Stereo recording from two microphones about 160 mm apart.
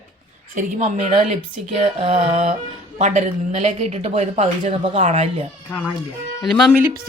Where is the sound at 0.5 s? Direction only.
55° right (ahead or behind).